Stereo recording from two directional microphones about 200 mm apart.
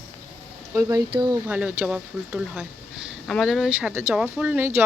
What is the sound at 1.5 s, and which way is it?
Speech, 5° right (ahead or behind).